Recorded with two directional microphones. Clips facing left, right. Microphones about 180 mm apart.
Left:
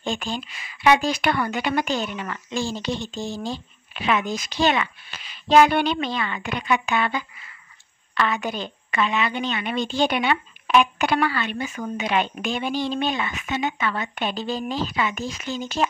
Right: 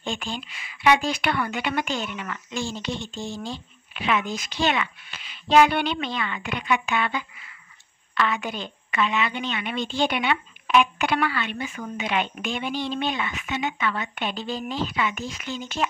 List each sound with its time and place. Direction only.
0.0 s a woman's voice: 40° left (ahead or behind)